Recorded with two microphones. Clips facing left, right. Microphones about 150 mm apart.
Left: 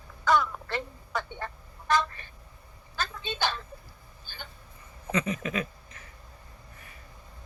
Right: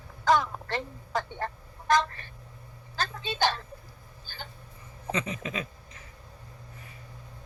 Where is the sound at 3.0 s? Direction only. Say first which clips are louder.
Right 3 dB; 40° right (ahead or behind).